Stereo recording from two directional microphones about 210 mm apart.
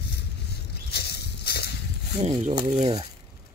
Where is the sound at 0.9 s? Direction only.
50° left (ahead or behind).